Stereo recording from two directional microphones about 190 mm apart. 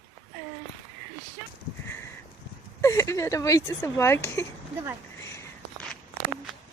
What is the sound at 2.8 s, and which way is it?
A woman's voice, 15° left (ahead or behind).